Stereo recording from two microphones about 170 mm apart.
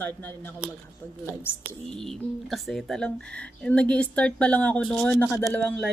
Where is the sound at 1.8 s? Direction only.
5° left (ahead or behind).